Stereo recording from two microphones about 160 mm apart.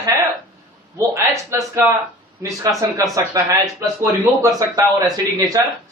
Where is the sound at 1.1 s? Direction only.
20° right (ahead or behind).